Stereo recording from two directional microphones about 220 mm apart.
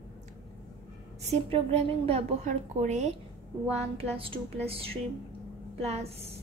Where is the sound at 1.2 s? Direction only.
30° right (ahead or behind).